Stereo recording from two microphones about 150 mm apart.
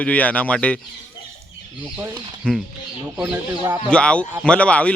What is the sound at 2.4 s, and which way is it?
Speech, 5° left (ahead or behind).